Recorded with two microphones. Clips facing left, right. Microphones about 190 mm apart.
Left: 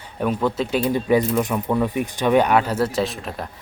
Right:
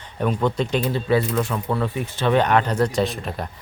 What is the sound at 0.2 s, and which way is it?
Speech, 5° left (ahead or behind).